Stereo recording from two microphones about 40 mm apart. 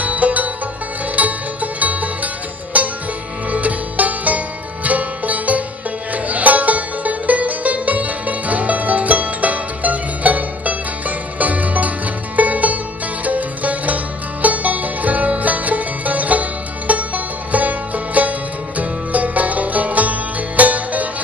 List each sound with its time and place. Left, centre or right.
0.0 s music: right